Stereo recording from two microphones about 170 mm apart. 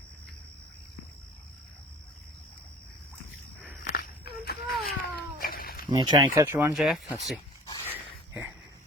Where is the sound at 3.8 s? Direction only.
65° left (ahead or behind).